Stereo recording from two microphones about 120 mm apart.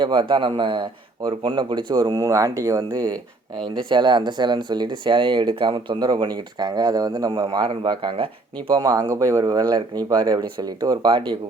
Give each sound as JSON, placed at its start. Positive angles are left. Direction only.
{"t": 0.0, "sound": "speech", "side_deg": -40}
{"t": 3.6, "sound": "speech", "side_deg": -40}
{"t": 8.7, "sound": "speech", "side_deg": -30}